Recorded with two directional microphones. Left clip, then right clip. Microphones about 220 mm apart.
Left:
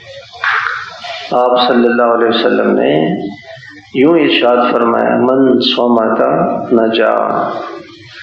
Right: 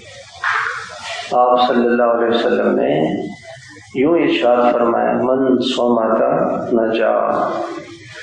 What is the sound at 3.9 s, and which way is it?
A man's voice, 45° left (ahead or behind).